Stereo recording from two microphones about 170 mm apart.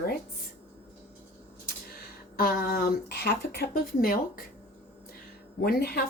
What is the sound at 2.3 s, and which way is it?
Speech, 60° left (ahead or behind).